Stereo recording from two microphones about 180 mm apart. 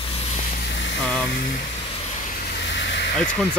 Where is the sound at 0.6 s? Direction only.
80° left.